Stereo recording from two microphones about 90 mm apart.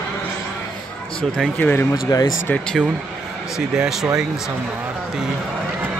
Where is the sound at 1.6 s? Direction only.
20° left (ahead or behind).